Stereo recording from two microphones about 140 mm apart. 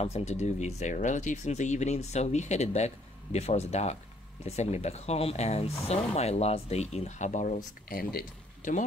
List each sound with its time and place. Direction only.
0.0 s speech: 50° left (ahead or behind); by 8.8 s 80° left